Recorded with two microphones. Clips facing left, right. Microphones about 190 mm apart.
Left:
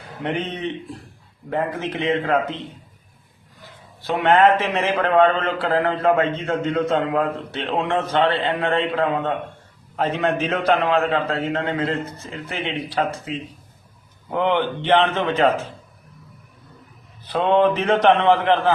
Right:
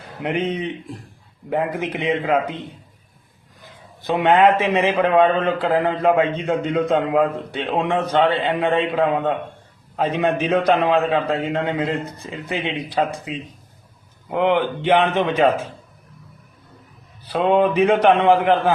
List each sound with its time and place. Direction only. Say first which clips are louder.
0.2 s a man's voice: right 3 dB; 10° right (ahead or behind)
4.0 s a man's voice: right 1 dB; 15° right (ahead or behind)
14.3 s a man's voice: right 2 dB; 5° right (ahead or behind)
17.2 s a man's voice: even; 10° right (ahead or behind)